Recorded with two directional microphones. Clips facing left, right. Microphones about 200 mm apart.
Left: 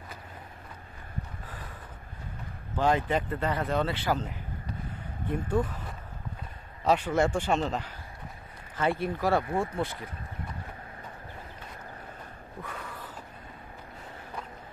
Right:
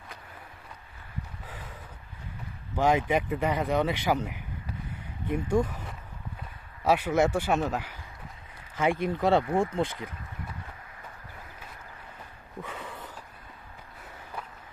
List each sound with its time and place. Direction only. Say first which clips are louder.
2.8 s speech: right 2 dB; 15° right (ahead or behind)
6.8 s speech: right 1 dB; 10° right (ahead or behind)
12.6 s a sound: right 1 dB; 25° right (ahead or behind)